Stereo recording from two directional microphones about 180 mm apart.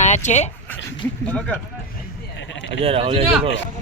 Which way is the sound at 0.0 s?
40° left (ahead or behind).